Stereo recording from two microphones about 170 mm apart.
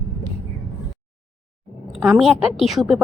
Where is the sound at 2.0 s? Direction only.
Centre (ahead or behind).